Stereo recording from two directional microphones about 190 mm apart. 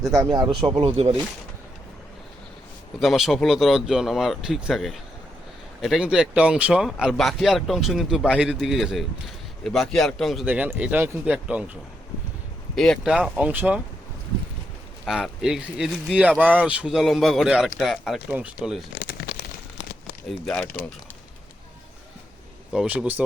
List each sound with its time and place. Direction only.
0.1 s speech: 20° right (ahead or behind)
3.0 s speech: centre (ahead or behind)
15.0 s speech: 5° right (ahead or behind)
18.9 s a sound: 55° left (ahead or behind)
20.2 s speech: centre (ahead or behind)
22.7 s speech: 5° right (ahead or behind)